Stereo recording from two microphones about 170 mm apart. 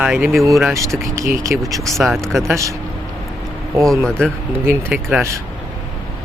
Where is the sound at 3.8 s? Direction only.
5° left (ahead or behind).